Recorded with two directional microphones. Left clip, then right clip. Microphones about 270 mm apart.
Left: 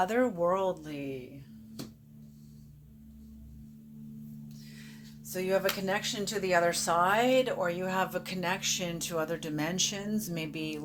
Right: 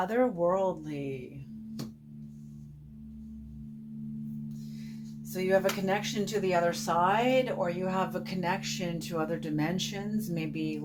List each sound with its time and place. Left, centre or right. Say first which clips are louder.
0.0 s speech: even; left
5.3 s speech: right 2 dB; left